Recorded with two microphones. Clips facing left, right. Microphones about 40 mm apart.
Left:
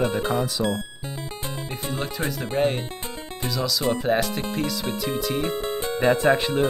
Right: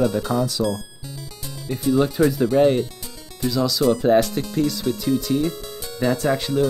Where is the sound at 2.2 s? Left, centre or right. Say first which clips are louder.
Right 6 dB; left.